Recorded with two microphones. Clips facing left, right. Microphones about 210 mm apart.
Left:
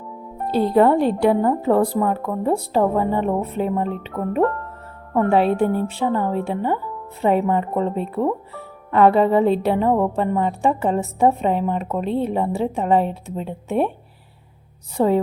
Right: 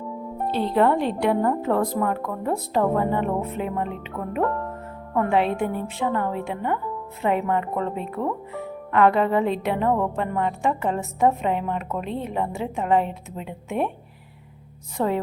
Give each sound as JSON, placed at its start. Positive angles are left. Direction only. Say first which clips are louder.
{"t": 0.5, "sound": "a woman's voice", "louder": "left 5 dB", "side_deg": 40}
{"t": 5.1, "sound": "a woman's voice", "louder": "left 4 dB", "side_deg": 35}
{"t": 14.9, "sound": "a woman's voice", "louder": "left 6 dB", "side_deg": 35}